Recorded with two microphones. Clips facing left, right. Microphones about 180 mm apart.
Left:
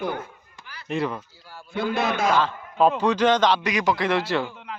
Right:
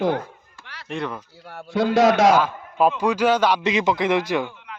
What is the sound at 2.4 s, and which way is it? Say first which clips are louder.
A man's voice: right 1 dB; 10° right (ahead or behind).